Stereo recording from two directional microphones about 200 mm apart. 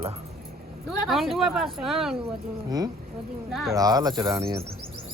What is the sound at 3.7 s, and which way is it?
Speech, 20° right (ahead or behind).